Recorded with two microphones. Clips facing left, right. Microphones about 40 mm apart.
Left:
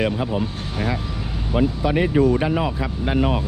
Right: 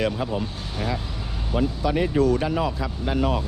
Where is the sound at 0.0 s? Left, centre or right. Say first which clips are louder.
Left 3 dB; centre.